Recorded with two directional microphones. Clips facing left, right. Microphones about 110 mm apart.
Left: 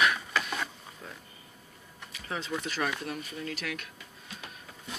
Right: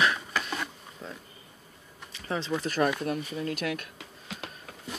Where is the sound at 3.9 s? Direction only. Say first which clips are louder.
Right 5 dB; 90° right.